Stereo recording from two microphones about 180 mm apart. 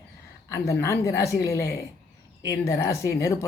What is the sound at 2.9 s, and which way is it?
Speech, 15° left (ahead or behind).